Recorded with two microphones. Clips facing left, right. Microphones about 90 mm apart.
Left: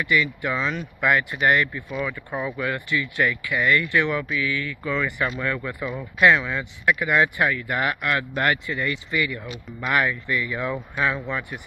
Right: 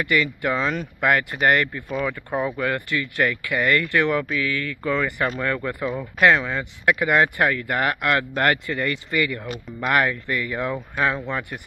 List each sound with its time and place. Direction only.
0.0 s speech: 60° right (ahead or behind); by 6.6 s 40° right (ahead or behind)
6.9 s speech: 80° right
7.2 s speech: 50° right (ahead or behind)
8.0 s speech: 80° right
8.4 s speech: 55° right (ahead or behind)